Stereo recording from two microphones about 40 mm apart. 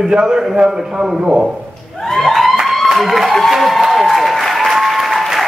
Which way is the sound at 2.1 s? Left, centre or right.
Centre.